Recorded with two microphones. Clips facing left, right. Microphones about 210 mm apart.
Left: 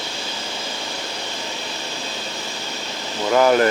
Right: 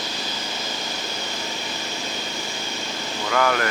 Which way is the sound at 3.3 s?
25° left (ahead or behind).